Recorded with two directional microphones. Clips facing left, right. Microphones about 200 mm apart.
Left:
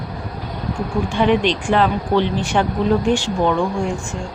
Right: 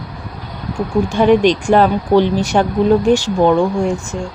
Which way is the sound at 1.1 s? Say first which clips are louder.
Right 5 dB; 45° right (ahead or behind).